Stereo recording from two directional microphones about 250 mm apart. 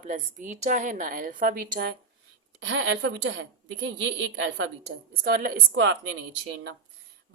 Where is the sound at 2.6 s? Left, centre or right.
Right.